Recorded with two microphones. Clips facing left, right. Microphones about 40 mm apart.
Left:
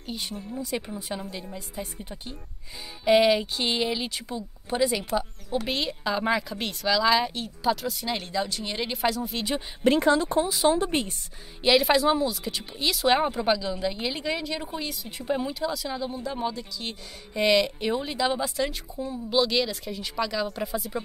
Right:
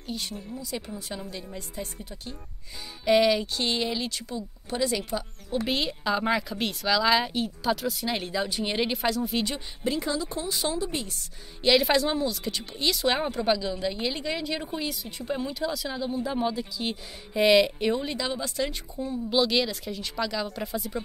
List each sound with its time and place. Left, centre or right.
0.0 s speech: centre
0.6 s speech: left
1.2 s speech: centre
3.1 s speech: centre
5.7 s speech: centre
8.9 s speech: centre
9.8 s speech: left
11.6 s speech: centre
15.0 s speech: centre